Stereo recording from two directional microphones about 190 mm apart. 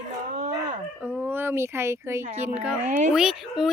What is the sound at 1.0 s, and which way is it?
Speech, 10° right (ahead or behind).